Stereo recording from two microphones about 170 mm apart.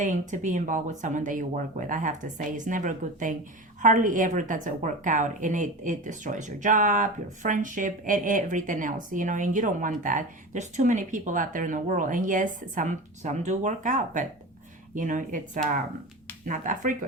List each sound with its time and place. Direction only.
0.0 s a woman's voice: 50° right (ahead or behind)